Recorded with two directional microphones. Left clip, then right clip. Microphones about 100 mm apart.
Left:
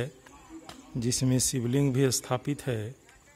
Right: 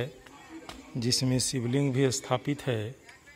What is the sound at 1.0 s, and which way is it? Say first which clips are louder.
Speech: even; 80° left.